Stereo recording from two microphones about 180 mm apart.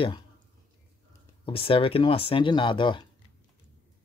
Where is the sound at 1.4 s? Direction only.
30° left (ahead or behind).